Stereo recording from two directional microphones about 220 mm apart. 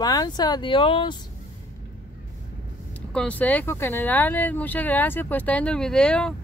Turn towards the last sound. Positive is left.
turn(degrees=5)  # may be behind; listen again after turning